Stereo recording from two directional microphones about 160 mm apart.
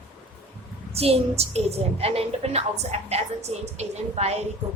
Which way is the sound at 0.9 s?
40° right (ahead or behind).